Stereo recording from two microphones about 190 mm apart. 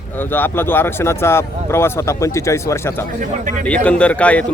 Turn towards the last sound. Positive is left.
turn(degrees=5)  # may be behind; listen again after turning